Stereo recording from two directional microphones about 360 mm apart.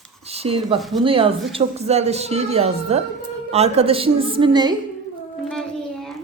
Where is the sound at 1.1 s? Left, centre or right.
Centre.